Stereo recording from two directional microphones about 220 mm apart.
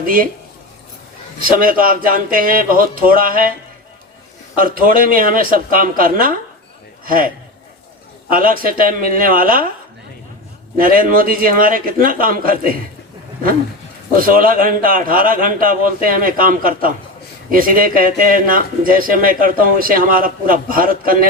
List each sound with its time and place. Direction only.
0.0 s a man's voice: 40° right (ahead or behind)
1.4 s a man's voice: 40° right (ahead or behind)
4.5 s a man's voice: 40° right (ahead or behind)
8.3 s a man's voice: 40° right (ahead or behind)
10.8 s a man's voice: 40° right (ahead or behind)
14.2 s a man's voice: 40° right (ahead or behind)